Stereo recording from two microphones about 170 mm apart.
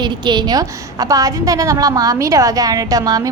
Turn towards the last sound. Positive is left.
turn(degrees=-20)  # may be behind; listen again after turning